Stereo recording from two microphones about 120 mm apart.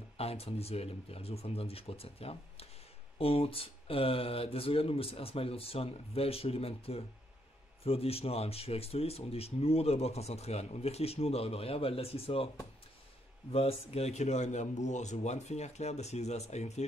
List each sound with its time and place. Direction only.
0.2 s speech: 55° left (ahead or behind)
13.5 s a man's voice: 55° left (ahead or behind)